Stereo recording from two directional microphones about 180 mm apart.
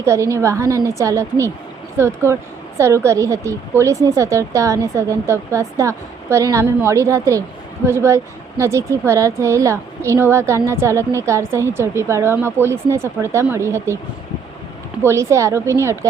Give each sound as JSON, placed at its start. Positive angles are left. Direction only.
{"t": 0.0, "sound": "speech", "side_deg": -15}
{"t": 15.0, "sound": "speech", "side_deg": -15}